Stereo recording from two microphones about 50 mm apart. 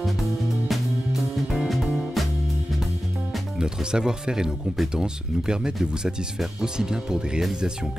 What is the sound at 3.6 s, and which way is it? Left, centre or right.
Speech, centre.